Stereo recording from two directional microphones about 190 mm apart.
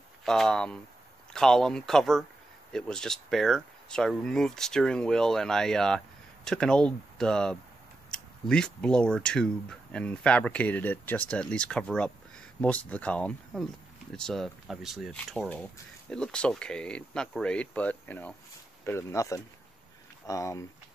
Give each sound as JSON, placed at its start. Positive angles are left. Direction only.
{"t": 0.2, "sound": "speech", "side_deg": 5}